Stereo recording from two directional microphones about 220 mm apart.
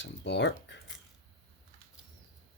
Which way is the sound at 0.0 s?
50° left (ahead or behind).